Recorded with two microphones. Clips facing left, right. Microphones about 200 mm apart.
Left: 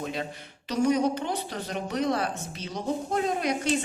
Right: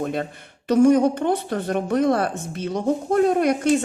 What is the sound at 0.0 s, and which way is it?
A woman's voice, 50° right (ahead or behind).